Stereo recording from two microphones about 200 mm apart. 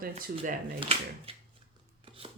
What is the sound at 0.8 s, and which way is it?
Speech, 30° right (ahead or behind).